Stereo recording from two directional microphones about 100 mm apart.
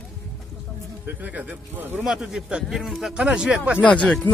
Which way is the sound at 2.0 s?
5° right (ahead or behind).